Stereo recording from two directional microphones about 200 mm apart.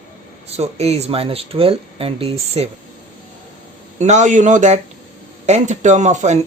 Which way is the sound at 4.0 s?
35° right (ahead or behind).